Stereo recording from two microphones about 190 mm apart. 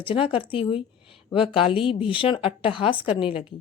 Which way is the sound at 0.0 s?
30° left (ahead or behind).